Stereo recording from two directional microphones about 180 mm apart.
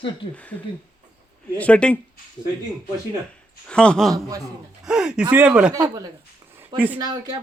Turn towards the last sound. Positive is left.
turn(degrees=-25)  # may be behind; listen again after turning